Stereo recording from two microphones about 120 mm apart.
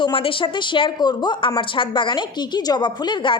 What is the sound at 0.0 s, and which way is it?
Speech, 50° left (ahead or behind).